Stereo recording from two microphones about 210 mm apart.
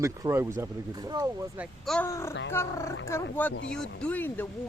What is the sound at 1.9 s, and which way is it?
Speech, 15° left (ahead or behind).